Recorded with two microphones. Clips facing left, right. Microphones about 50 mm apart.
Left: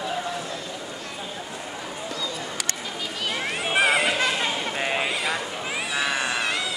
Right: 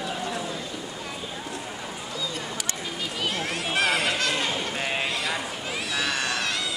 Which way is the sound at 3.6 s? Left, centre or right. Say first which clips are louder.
Left 4 dB; centre.